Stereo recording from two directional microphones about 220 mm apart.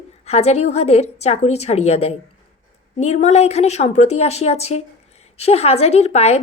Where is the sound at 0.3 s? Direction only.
30° left (ahead or behind).